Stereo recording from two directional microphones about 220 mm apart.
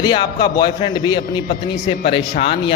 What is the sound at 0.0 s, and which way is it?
A man's voice, 20° left (ahead or behind).